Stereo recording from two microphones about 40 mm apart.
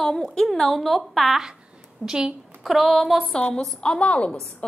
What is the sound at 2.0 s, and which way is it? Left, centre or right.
Speech, centre.